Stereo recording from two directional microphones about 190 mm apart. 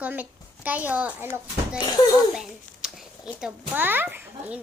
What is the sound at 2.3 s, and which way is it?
A child's voice, centre (ahead or behind).